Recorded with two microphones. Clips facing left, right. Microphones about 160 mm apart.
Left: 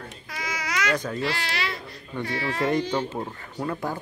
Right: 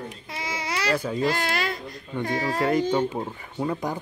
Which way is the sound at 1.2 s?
45° right (ahead or behind).